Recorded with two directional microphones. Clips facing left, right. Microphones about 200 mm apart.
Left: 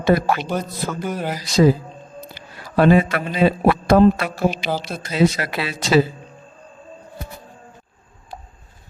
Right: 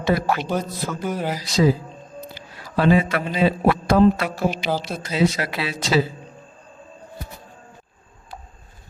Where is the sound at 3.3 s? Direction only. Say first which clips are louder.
Left 2 dB; 55° left (ahead or behind).